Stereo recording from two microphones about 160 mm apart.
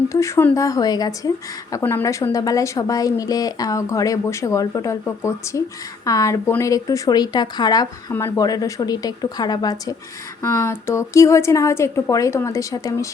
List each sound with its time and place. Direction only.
0.1 s speech: 20° left (ahead or behind)
1.7 s a woman's voice: 15° left (ahead or behind)